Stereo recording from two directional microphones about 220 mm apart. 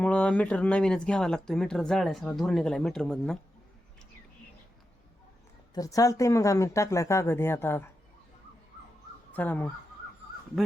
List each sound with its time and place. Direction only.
0.0 s speech: 5° left (ahead or behind)
5.7 s speech: 15° left (ahead or behind)
9.3 s speech: 10° left (ahead or behind)